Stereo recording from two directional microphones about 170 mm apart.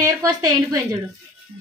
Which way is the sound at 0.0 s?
20° right (ahead or behind).